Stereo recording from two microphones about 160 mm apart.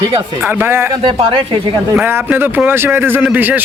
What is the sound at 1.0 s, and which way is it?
Speech, 30° right (ahead or behind).